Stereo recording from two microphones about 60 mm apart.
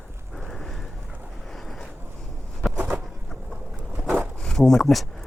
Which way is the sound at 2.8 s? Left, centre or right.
Right.